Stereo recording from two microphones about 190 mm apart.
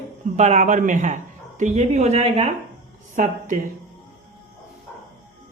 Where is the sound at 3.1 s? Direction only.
40° right (ahead or behind).